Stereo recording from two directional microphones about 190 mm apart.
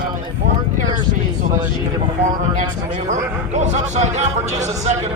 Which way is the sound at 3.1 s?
40° right (ahead or behind).